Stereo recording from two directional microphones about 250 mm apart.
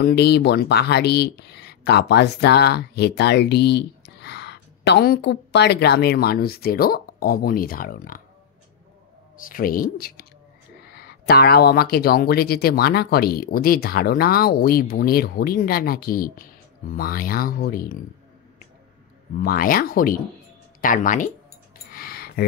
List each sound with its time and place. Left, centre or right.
0.0 s speech: left
9.4 s speech: left
19.4 s speech: left
21.9 s a sound: left